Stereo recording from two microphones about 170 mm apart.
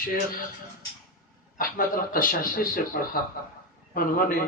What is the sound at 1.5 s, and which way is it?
A man's voice, 55° left (ahead or behind).